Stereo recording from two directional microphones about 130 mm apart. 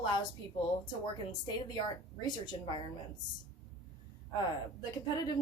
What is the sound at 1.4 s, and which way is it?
A woman's voice, 35° left (ahead or behind).